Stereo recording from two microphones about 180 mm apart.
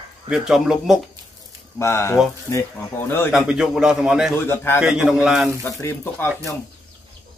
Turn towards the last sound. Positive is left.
turn(degrees=15)  # may be behind; listen again after turning